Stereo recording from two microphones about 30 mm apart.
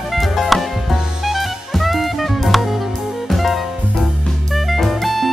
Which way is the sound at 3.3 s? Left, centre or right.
Centre.